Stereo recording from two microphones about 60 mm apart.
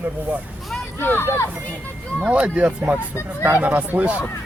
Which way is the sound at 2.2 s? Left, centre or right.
Right.